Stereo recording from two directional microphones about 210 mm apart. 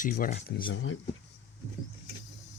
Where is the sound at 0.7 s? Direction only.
70° left (ahead or behind).